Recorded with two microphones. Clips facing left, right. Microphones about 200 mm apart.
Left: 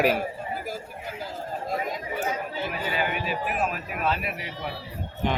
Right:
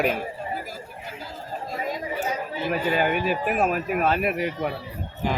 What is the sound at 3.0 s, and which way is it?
Speech, 50° right (ahead or behind).